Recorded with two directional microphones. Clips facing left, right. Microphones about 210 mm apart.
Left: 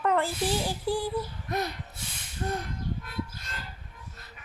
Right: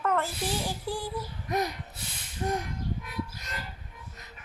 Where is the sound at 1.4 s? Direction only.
15° right (ahead or behind).